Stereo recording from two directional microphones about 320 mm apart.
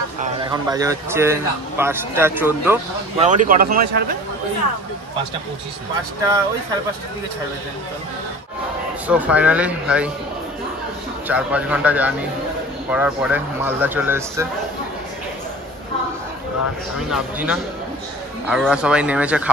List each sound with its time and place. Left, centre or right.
0.2 s speech: centre
3.2 s speech: right
9.0 s speech: centre
11.2 s speech: centre
17.1 s speech: centre